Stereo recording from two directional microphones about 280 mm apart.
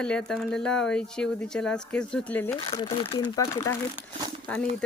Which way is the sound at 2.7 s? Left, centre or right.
Centre.